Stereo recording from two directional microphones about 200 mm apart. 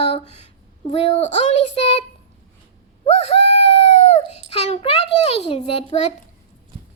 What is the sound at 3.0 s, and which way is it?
Bird, 30° left (ahead or behind).